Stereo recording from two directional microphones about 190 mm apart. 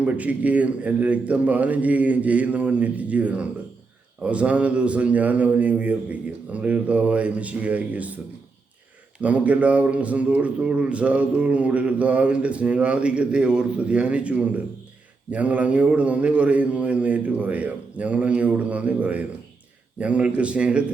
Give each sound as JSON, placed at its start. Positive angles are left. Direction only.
{"t": 0.0, "sound": "a man's voice", "side_deg": -5}
{"t": 9.2, "sound": "a man's voice", "side_deg": -5}